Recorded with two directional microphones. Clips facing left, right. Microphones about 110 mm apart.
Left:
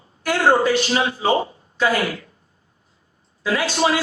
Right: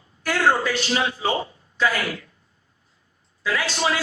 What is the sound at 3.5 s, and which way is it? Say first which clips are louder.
Speech: left 4 dB; 35° left (ahead or behind).